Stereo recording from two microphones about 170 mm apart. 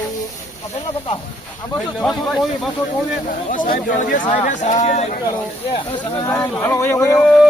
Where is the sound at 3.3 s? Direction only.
50° left (ahead or behind).